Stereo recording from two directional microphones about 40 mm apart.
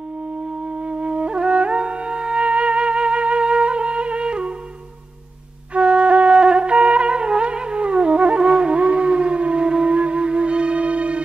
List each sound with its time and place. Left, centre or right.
0.8 s music: right
5.8 s music: right